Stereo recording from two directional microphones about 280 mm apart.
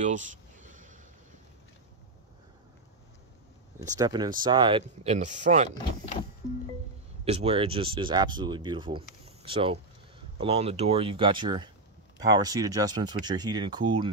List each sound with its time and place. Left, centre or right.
0.0 s speech: right
3.8 s speech: centre
7.2 s speech: right